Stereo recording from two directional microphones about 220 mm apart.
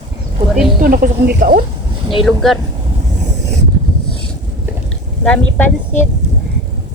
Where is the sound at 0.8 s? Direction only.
40° right (ahead or behind).